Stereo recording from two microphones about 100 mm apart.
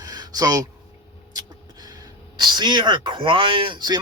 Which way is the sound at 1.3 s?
40° right (ahead or behind).